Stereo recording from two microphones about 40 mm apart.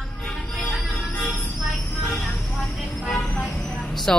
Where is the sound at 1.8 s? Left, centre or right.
Left.